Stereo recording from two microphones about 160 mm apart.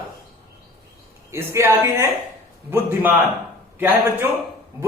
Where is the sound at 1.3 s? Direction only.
15° right (ahead or behind).